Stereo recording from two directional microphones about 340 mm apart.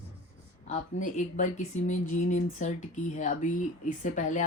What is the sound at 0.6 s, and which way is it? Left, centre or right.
Speech, left.